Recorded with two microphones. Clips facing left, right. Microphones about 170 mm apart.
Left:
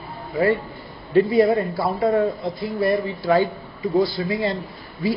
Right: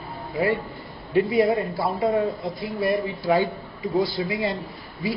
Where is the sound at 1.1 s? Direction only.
15° right (ahead or behind).